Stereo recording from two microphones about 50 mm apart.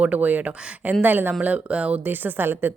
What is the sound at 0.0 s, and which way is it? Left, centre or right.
A woman's voice, right.